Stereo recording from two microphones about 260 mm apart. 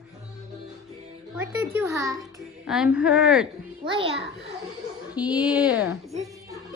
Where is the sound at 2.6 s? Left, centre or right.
Centre.